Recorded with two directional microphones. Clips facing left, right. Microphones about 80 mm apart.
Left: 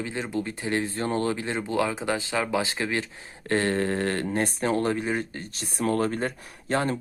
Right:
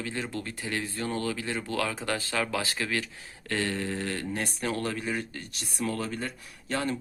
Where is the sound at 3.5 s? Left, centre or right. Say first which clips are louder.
Left 6 dB; left.